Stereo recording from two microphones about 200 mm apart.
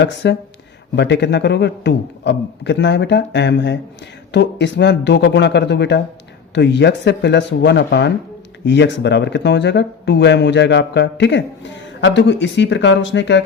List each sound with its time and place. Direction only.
0.0 s speech: 60° left (ahead or behind)